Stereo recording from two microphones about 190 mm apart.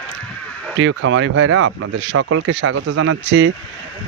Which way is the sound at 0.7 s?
80° right.